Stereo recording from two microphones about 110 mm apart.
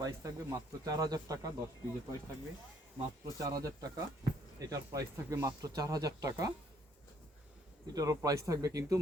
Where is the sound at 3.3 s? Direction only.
30° right (ahead or behind).